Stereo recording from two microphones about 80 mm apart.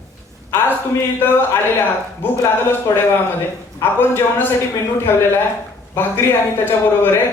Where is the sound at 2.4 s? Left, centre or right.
Left.